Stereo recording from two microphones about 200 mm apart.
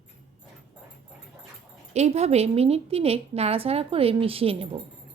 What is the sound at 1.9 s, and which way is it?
A woman's voice, 35° right (ahead or behind).